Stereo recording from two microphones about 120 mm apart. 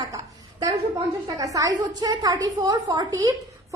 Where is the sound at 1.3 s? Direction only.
30° right (ahead or behind).